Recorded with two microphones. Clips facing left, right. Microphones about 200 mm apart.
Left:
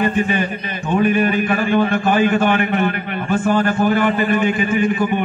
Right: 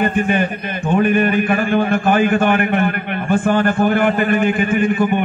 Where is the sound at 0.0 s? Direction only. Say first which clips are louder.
Right 1 dB; 55° right (ahead or behind).